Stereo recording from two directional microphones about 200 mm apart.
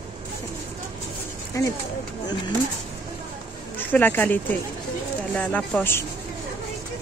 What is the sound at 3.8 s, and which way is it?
Speech, 10° left (ahead or behind).